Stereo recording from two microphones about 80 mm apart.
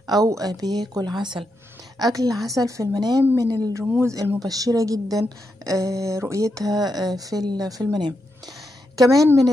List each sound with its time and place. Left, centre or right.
0.0 s speech: right
2.0 s a woman's voice: right